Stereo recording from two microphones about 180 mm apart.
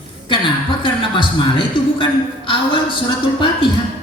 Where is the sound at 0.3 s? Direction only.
30° left (ahead or behind).